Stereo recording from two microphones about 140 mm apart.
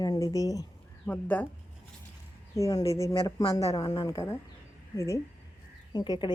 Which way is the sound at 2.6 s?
25° left (ahead or behind).